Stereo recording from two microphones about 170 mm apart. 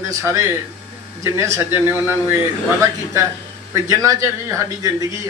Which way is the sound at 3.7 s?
20° right (ahead or behind).